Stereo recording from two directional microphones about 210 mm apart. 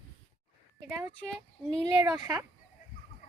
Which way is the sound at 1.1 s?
5° left (ahead or behind).